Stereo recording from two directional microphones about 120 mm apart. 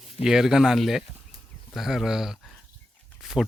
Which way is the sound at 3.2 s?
Centre (ahead or behind).